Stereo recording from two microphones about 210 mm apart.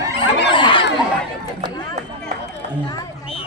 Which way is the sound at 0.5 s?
25° left (ahead or behind).